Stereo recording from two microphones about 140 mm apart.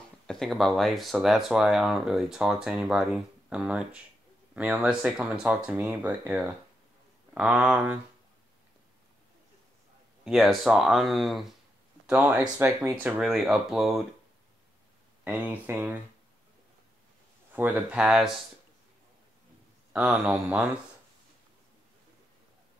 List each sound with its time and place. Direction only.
0.3 s speech: centre (ahead or behind)
10.2 s speech: centre (ahead or behind)
12.1 s speech: 10° right (ahead or behind)
13.2 s speech: centre (ahead or behind)
15.2 s speech: 15° right (ahead or behind)
17.5 s speech: 10° right (ahead or behind)
19.9 s speech: centre (ahead or behind)
20.2 s speech: 10° right (ahead or behind)